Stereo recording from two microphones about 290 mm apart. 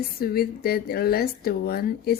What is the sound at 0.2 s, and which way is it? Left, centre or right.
Speech, left.